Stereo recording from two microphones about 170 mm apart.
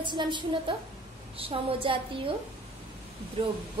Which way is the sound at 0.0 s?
25° right (ahead or behind).